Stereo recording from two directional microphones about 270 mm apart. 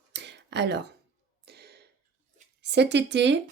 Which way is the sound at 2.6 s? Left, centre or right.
Right.